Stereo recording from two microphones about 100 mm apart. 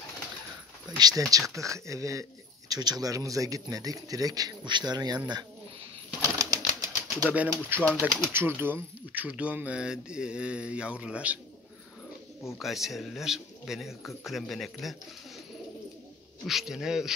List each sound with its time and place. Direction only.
0.9 s speech: 40° right (ahead or behind)
6.2 s pigeon: 35° right (ahead or behind)
7.7 s speech: 20° right (ahead or behind)
12.5 s a man's voice: centre (ahead or behind)
16.4 s a man's voice: 5° right (ahead or behind)